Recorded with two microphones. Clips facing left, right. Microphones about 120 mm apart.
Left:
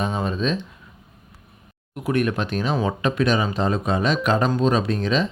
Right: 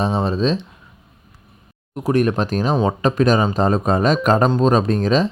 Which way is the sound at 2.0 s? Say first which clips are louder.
Right 5 dB; 35° right (ahead or behind).